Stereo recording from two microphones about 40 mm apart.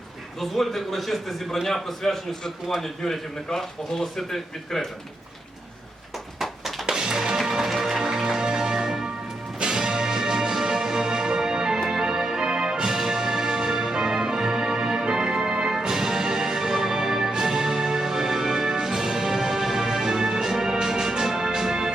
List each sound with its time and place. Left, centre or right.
0.3 s a man's voice: centre
6.8 s music: centre